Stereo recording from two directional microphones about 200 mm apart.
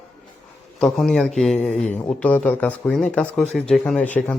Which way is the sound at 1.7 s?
35° left (ahead or behind).